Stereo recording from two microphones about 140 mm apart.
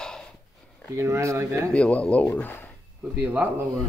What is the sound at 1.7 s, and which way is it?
Speech, 10° left (ahead or behind).